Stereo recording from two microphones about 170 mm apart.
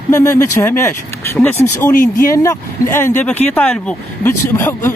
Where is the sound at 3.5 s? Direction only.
10° left (ahead or behind).